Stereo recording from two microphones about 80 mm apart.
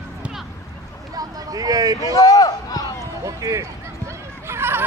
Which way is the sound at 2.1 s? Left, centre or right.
Left.